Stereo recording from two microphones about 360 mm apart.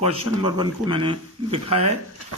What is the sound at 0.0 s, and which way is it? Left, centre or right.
Speech, centre.